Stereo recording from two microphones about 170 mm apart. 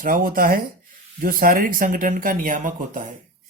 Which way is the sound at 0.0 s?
55° right (ahead or behind).